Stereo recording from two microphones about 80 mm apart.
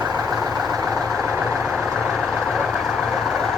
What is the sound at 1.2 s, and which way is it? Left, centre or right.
Vehicle, right.